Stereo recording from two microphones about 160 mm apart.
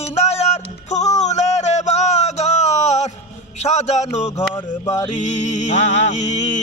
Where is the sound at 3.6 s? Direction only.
45° left (ahead or behind).